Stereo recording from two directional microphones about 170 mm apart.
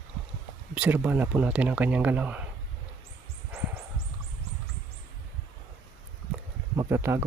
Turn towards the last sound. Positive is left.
turn(degrees=-15)  # may be behind; listen again after turning